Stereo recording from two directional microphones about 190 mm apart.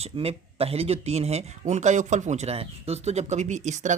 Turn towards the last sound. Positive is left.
turn(degrees=-40)  # may be behind; listen again after turning